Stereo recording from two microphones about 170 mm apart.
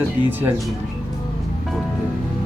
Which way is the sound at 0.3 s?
10° right (ahead or behind).